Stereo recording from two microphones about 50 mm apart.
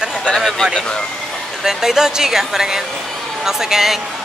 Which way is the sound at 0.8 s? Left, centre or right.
Left.